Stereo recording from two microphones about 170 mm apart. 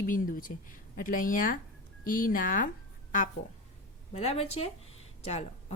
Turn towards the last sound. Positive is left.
turn(degrees=35)  # may be behind; listen again after turning